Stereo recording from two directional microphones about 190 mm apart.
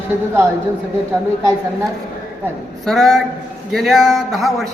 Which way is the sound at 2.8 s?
Centre (ahead or behind).